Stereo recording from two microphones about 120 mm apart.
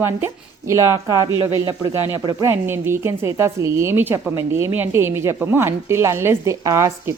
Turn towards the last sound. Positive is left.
turn(degrees=-25)  # may be behind; listen again after turning